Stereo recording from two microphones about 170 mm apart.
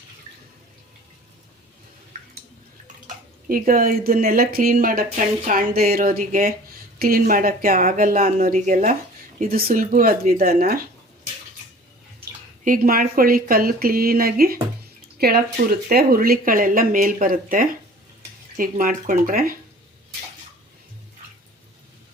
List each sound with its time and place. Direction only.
3.5 s a woman's voice: 55° right (ahead or behind)
9.4 s a woman's voice: 60° right (ahead or behind)
12.6 s a woman's voice: 55° right (ahead or behind)